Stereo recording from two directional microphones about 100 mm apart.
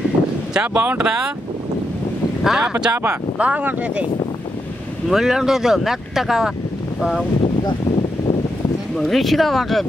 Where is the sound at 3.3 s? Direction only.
15° right (ahead or behind).